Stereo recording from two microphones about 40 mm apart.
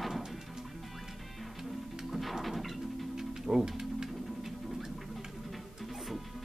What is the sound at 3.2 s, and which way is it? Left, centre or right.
Music, centre.